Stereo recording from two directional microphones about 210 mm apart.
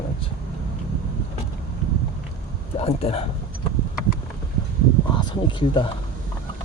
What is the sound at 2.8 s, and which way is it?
Speech, 30° left (ahead or behind).